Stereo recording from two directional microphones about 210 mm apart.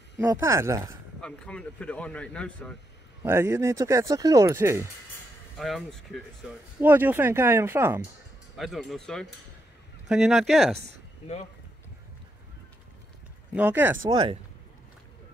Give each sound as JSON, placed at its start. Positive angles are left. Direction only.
{"t": 0.2, "sound": "speech", "side_deg": -15}
{"t": 1.2, "sound": "speech", "side_deg": 5}
{"t": 3.3, "sound": "speech", "side_deg": -10}
{"t": 5.6, "sound": "speech", "side_deg": 0}
{"t": 8.5, "sound": "speech", "side_deg": 0}
{"t": 13.5, "sound": "speech", "side_deg": -10}
{"t": 14.0, "sound": "speech", "side_deg": -20}